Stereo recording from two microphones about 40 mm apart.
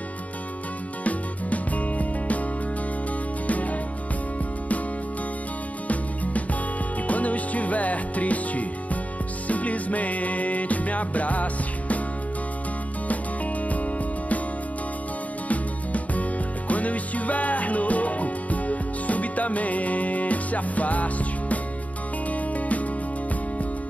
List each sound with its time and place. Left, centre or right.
1.0 s music: left
3.4 s music: left
5.9 s music: left
13.7 s music: left
15.4 s music: left